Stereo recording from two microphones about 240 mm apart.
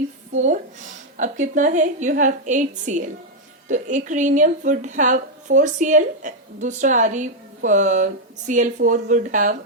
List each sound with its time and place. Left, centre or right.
0.3 s a woman's voice: right